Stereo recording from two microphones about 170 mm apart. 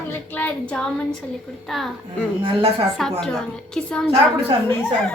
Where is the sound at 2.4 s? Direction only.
30° right (ahead or behind).